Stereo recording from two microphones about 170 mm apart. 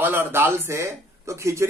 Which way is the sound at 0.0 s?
10° right (ahead or behind).